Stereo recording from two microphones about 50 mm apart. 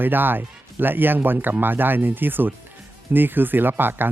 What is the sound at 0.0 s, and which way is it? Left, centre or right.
Speech, right.